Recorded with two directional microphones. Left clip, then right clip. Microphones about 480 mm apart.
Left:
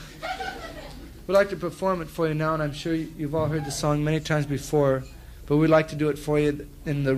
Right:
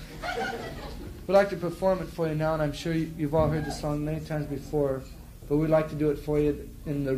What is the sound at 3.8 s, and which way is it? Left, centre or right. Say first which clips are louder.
A man's voice: left 6 dB; left.